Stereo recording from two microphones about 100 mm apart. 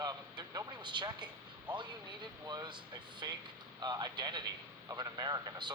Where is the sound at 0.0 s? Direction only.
40° right (ahead or behind).